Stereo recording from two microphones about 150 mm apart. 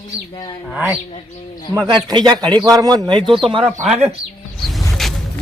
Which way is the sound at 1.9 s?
30° right (ahead or behind).